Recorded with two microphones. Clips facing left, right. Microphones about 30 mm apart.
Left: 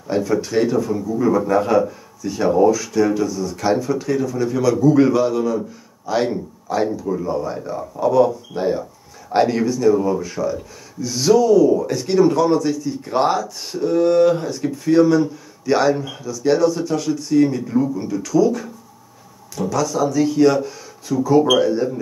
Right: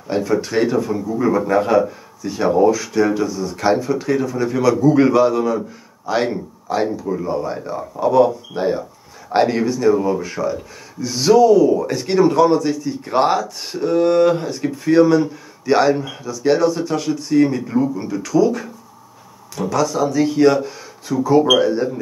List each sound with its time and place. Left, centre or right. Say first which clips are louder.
0.1 s speech: even; right